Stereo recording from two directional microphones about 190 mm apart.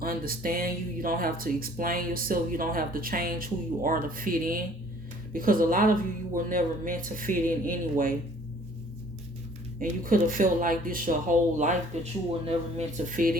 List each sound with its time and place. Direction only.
0.0 s speech: 50° right (ahead or behind)
9.8 s speech: 45° right (ahead or behind)